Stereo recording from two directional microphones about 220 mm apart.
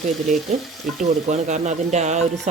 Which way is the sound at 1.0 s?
35° right (ahead or behind).